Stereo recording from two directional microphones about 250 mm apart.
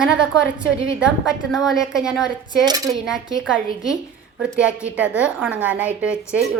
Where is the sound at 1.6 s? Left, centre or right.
Centre.